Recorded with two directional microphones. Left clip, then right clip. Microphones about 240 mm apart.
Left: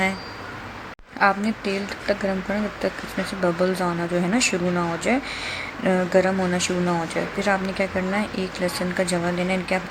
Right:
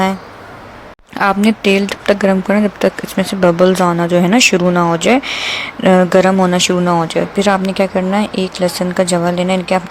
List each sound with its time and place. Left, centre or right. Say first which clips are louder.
1.5 s speech: right 13 dB; right